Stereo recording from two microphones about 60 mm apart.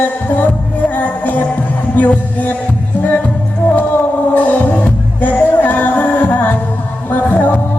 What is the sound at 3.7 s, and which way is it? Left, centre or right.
Music, left.